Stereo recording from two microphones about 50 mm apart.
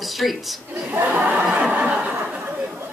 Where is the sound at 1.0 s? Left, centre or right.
Right.